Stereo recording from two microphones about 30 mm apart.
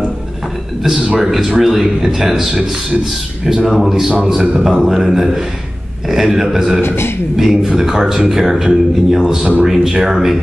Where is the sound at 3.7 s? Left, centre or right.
Centre.